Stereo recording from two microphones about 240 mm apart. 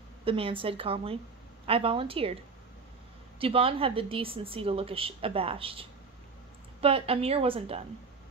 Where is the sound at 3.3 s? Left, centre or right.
Right.